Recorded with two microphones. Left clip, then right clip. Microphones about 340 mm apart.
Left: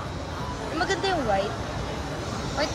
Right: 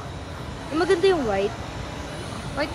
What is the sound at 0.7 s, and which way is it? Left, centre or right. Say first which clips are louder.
Speech: right 7 dB; right.